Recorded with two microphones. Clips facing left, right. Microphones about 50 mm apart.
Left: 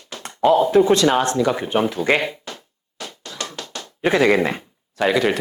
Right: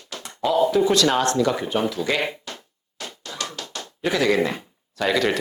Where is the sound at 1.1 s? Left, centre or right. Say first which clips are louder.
Left 2 dB; centre.